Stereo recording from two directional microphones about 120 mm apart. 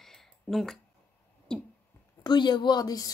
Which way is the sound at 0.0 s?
Centre (ahead or behind).